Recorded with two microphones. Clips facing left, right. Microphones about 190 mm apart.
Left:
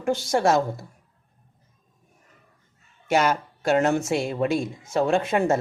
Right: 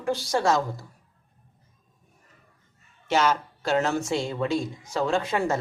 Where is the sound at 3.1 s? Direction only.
55° left (ahead or behind).